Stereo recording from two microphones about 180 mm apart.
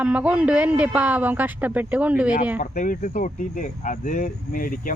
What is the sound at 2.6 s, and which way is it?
Speech, 45° left (ahead or behind).